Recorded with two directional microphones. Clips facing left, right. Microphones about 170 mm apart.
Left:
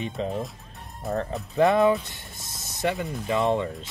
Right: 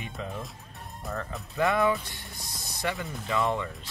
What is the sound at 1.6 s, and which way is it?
Speech, 20° left (ahead or behind).